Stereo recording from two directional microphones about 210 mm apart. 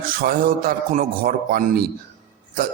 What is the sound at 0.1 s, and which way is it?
A man's voice, 45° right (ahead or behind).